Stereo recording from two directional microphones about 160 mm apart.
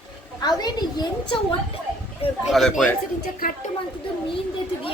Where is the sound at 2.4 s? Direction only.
Centre (ahead or behind).